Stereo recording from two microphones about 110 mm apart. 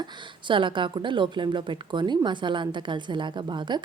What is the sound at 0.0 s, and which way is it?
A woman's voice, 50° right (ahead or behind).